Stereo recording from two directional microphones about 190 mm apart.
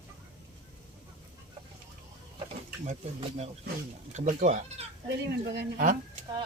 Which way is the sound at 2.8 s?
35° right (ahead or behind).